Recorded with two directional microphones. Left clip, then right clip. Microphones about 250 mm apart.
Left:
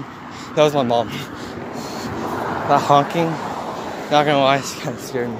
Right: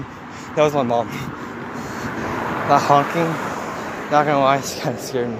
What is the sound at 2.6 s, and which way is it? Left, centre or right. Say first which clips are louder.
Speech: even; centre.